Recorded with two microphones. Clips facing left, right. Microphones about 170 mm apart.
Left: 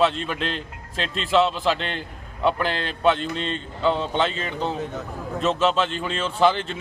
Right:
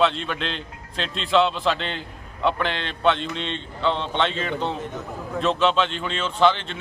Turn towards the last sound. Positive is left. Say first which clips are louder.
# even
turn(degrees=5)  # may be behind; listen again after turning